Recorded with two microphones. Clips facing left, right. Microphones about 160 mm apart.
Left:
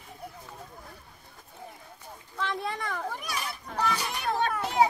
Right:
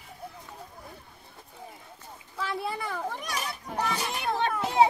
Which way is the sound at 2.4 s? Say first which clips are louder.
Even; 5° right (ahead or behind).